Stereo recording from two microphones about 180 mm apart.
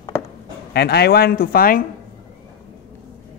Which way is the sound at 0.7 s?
65° left (ahead or behind).